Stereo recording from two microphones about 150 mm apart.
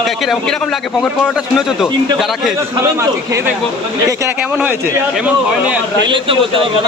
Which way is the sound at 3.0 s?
20° right (ahead or behind).